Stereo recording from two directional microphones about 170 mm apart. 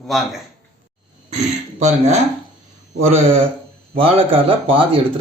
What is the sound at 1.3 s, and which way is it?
Speech, 40° right (ahead or behind).